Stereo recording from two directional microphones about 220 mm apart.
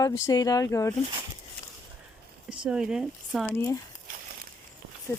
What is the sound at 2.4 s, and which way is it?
Speech, 5° right (ahead or behind).